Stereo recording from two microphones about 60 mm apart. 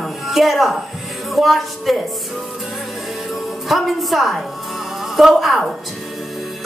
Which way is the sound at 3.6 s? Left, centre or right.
Centre.